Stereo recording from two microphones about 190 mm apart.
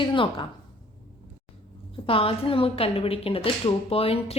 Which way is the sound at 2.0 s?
30° left (ahead or behind).